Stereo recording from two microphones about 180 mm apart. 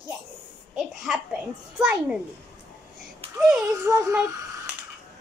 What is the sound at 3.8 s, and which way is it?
Synthetic singing, 15° right (ahead or behind).